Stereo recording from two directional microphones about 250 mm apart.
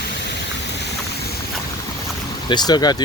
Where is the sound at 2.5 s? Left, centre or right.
Centre.